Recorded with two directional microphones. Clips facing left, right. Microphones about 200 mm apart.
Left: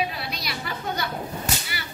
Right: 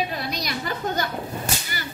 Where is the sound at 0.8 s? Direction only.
40° right (ahead or behind).